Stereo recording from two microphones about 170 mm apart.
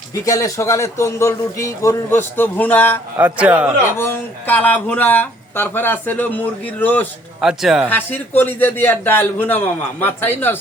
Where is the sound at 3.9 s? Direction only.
15° left (ahead or behind).